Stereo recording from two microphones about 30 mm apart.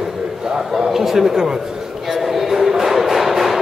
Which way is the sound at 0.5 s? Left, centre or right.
Right.